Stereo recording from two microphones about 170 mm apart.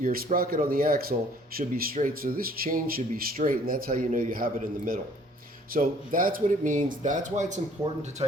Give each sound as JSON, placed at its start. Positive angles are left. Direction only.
{"t": 0.0, "sound": "speech", "side_deg": -55}
{"t": 5.7, "sound": "speech", "side_deg": -55}
{"t": 8.2, "sound": "speech", "side_deg": -30}